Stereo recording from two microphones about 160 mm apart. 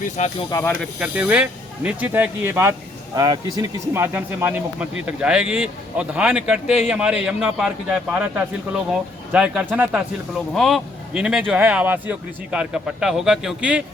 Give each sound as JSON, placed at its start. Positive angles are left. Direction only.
{"t": 0.2, "sound": "speech", "side_deg": 50}
{"t": 0.5, "sound": "speech", "side_deg": 10}
{"t": 0.9, "sound": "speech", "side_deg": -10}
{"t": 10.3, "sound": "a man's voice", "side_deg": 0}